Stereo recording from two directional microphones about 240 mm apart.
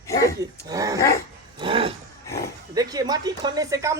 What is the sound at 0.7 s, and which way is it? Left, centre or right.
Speech, centre.